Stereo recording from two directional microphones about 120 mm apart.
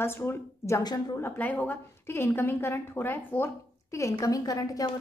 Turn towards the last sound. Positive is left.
turn(degrees=30)  # may be behind; listen again after turning